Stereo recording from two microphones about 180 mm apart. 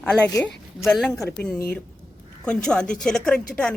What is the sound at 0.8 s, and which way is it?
Speech, centre (ahead or behind).